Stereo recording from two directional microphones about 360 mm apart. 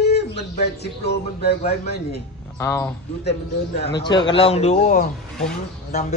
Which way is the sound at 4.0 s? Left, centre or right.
Centre.